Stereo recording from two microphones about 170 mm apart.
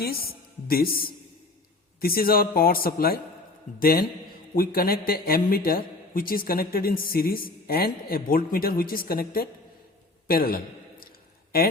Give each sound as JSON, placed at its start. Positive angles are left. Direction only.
{"t": 0.0, "sound": "a woman's voice", "side_deg": 65}